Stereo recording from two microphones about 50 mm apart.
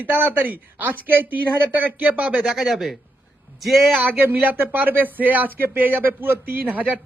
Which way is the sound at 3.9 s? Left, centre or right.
Right.